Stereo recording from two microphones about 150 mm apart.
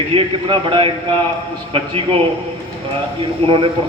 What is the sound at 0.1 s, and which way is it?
Speech, 35° right (ahead or behind).